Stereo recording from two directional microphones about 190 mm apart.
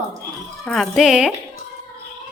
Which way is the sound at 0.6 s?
Centre (ahead or behind).